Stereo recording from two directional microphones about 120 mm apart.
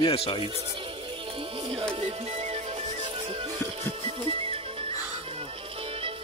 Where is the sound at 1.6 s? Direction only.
50° right (ahead or behind).